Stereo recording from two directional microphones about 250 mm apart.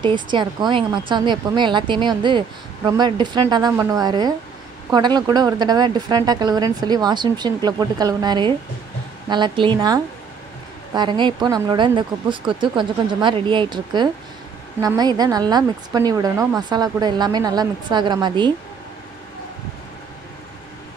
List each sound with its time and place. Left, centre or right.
0.0 s a woman's voice: centre